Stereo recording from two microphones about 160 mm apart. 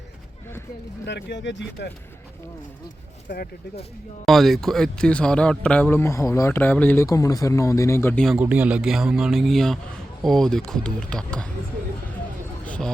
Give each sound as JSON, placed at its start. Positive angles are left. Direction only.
{"t": 1.0, "sound": "speech", "side_deg": 90}
{"t": 3.2, "sound": "speech", "side_deg": 70}
{"t": 4.3, "sound": "speech", "side_deg": 0}
{"t": 8.4, "sound": "a man's voice", "side_deg": -10}
{"t": 12.6, "sound": "a sound", "side_deg": 10}